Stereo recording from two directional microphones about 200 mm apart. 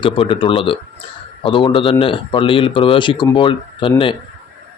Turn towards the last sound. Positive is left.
turn(degrees=25)  # may be behind; listen again after turning